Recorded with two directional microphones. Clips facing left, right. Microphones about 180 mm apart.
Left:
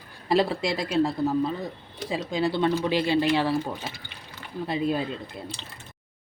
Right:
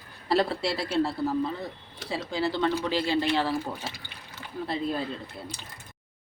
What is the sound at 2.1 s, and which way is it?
Speech, 15° left (ahead or behind).